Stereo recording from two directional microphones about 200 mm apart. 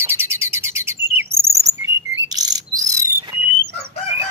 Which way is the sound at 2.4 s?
20° right (ahead or behind).